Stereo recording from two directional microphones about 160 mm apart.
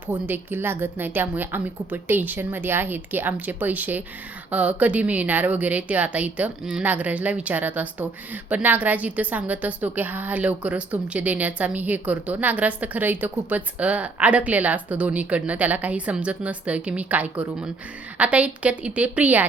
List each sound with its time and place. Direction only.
0.1 s speech: 15° right (ahead or behind)